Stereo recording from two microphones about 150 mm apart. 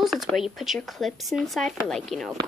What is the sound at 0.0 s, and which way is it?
Speech, centre (ahead or behind).